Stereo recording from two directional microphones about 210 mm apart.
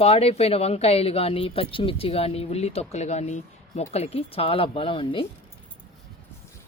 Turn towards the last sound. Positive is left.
turn(degrees=25)  # may be behind; listen again after turning